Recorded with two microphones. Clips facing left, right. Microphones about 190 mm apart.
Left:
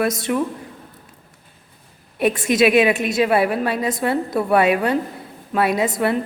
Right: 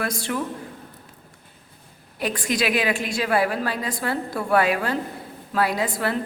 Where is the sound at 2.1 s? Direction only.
25° left (ahead or behind).